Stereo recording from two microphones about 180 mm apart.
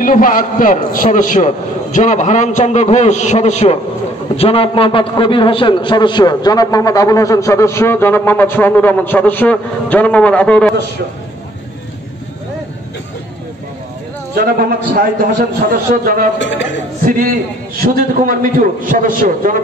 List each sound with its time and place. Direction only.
0.0 s a man's voice: 50° left (ahead or behind); by 10.7 s 5° left (ahead or behind)
14.3 s a man's voice: 55° right (ahead or behind)
16.3 s a man's voice: 90° left
17.7 s a man's voice: 55° right (ahead or behind)